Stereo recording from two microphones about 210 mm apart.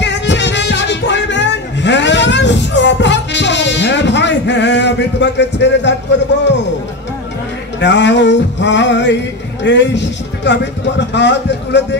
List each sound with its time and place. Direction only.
0.0 s music: 55° left (ahead or behind)
7.8 s music: 55° left (ahead or behind)
9.6 s speech: 55° left (ahead or behind)